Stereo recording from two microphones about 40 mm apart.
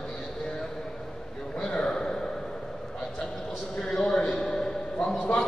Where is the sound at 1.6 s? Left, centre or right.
Left.